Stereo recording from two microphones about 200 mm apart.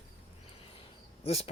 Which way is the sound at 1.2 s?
30° left (ahead or behind).